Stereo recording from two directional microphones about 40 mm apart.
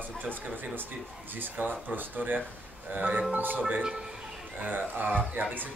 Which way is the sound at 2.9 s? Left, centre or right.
Right.